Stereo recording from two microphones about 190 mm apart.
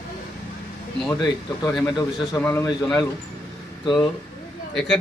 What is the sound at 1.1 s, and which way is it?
Speech, 20° left (ahead or behind).